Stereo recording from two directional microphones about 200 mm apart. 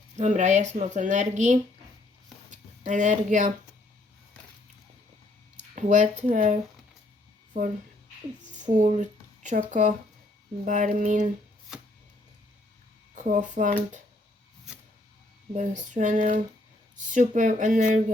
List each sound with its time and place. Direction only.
0.2 s speech: 35° right (ahead or behind)
5.5 s speech: 40° right (ahead or behind)
8.5 s speech: 40° right (ahead or behind)
13.1 s speech: 35° right (ahead or behind)
15.5 s speech: 40° right (ahead or behind)